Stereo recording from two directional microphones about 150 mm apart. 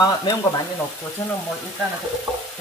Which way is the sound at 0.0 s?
25° left (ahead or behind).